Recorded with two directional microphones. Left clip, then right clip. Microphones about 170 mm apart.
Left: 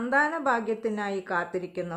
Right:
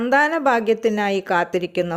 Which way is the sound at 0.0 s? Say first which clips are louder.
Right 8 dB; 40° right (ahead or behind).